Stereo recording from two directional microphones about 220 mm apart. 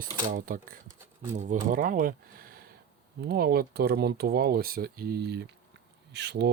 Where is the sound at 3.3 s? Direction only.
45° right (ahead or behind).